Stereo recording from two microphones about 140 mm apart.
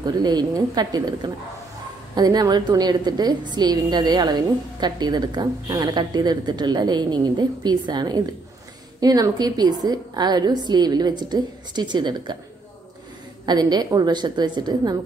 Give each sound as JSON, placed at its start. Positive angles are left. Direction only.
{"t": 0.0, "sound": "a woman's voice", "side_deg": -30}
{"t": 13.5, "sound": "a woman's voice", "side_deg": -30}